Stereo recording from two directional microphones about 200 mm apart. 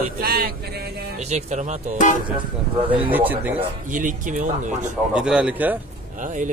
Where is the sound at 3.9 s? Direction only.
40° right (ahead or behind).